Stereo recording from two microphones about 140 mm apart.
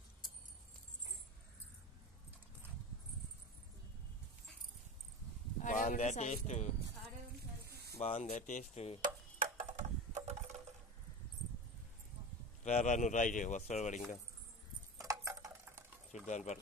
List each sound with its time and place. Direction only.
5.6 s speech: 65° left (ahead or behind)
8.0 s speech: 50° left (ahead or behind)
9.0 s a sound: 75° right (ahead or behind); by 10.3 s 55° right (ahead or behind)
12.6 s speech: 55° left (ahead or behind)
15.0 s a sound: 20° right (ahead or behind)
16.3 s speech: 55° left (ahead or behind)